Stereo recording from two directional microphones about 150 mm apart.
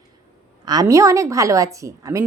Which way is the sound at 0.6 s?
25° right (ahead or behind).